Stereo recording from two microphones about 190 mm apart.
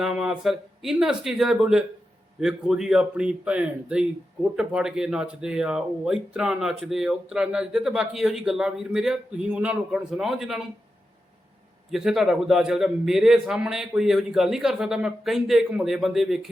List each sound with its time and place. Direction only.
0.0 s speech: 5° right (ahead or behind)
11.9 s speech: centre (ahead or behind)